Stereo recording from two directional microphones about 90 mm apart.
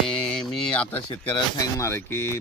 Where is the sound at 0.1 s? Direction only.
5° left (ahead or behind).